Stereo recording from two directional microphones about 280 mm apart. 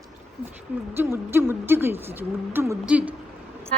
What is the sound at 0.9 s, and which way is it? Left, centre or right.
Speech, centre.